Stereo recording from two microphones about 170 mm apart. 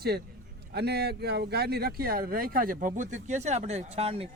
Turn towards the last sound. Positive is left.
turn(degrees=-35)  # may be behind; listen again after turning